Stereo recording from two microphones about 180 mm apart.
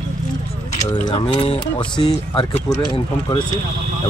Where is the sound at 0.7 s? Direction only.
40° left (ahead or behind).